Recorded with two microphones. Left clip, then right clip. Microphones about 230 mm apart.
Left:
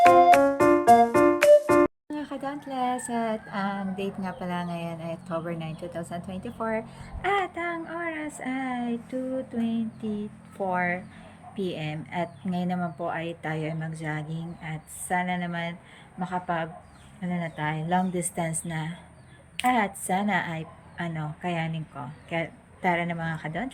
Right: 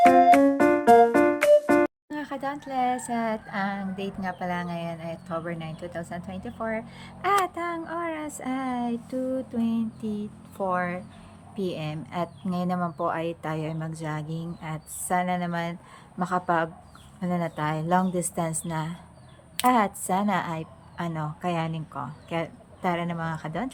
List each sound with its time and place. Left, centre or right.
0.0 s music: centre
7.2 s speech: centre